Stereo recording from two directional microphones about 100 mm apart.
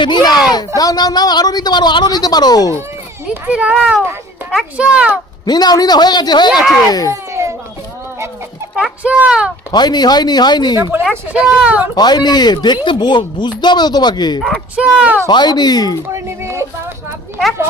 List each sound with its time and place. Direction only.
0.0 s speech: 45° left (ahead or behind)
3.2 s a child's voice: 10° right (ahead or behind)
5.5 s speech: 45° left (ahead or behind)
6.5 s speech: 5° right (ahead or behind)
6.8 s speech: 40° left (ahead or behind)
7.1 s a sound: 30° right (ahead or behind)
8.7 s speech: 10° right (ahead or behind)
9.7 s speech: 45° left (ahead or behind)
11.3 s speech: 10° right (ahead or behind)
11.9 s speech: 45° left (ahead or behind)
14.8 s speech: 10° right (ahead or behind)
15.3 s speech: 45° left (ahead or behind)
16.1 s speech: 30° right (ahead or behind)